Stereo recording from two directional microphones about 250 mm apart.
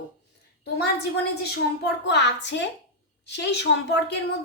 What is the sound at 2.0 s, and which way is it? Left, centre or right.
A woman's voice, left.